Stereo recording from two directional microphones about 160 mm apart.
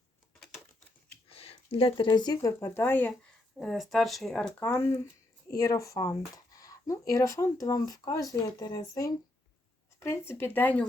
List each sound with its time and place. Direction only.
1.3 s speech: 35° left (ahead or behind); by 3.2 s 10° left (ahead or behind)
3.6 s speech: centre (ahead or behind)